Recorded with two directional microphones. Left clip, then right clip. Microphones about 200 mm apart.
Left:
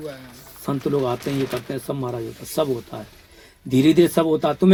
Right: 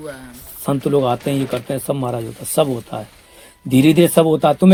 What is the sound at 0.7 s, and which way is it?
A man's voice, 40° right (ahead or behind).